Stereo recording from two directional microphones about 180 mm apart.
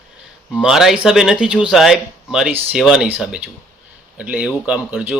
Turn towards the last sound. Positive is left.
turn(degrees=-5)  # may be behind; listen again after turning